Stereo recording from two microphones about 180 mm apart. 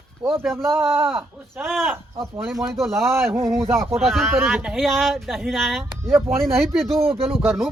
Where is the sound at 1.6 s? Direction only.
Centre (ahead or behind).